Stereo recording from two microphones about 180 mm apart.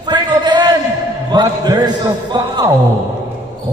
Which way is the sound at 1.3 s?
20° right (ahead or behind).